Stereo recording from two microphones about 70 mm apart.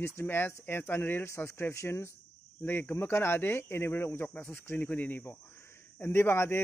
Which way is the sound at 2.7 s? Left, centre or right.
Left.